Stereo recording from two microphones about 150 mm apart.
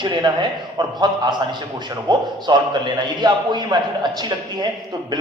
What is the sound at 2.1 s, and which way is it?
A man's voice, 30° right (ahead or behind).